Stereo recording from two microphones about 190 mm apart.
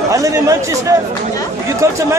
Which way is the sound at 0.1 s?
15° right (ahead or behind).